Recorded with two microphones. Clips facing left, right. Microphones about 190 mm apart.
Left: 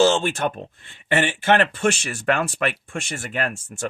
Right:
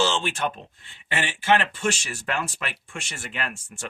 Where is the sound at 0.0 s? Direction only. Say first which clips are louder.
Left 6 dB; 45° left (ahead or behind).